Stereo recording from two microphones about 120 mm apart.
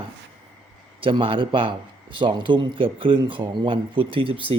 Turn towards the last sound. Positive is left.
turn(degrees=-45)  # may be behind; listen again after turning